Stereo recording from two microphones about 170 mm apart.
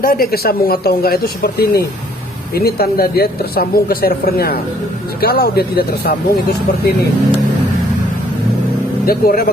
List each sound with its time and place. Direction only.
0.0 s speech: 60° left (ahead or behind)
9.0 s speech: 65° left (ahead or behind)